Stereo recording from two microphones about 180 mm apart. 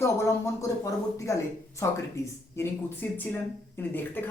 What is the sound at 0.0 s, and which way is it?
Speech, 15° left (ahead or behind).